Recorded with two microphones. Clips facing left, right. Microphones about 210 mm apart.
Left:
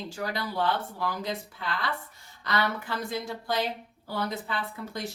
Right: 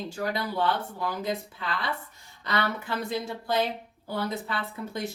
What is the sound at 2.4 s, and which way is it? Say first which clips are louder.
A woman's voice: even; 20° right (ahead or behind).